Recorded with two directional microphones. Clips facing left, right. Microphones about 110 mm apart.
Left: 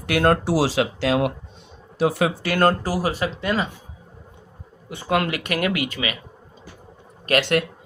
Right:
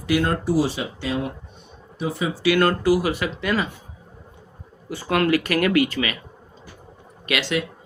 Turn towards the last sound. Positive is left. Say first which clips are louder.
# left 4 dB
turn(degrees=55)  # may be behind; listen again after turning